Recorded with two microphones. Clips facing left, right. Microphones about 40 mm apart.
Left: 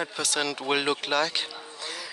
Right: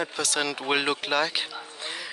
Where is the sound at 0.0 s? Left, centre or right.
Centre.